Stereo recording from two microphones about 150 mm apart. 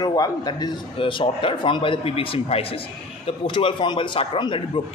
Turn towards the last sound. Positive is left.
turn(degrees=35)  # may be behind; listen again after turning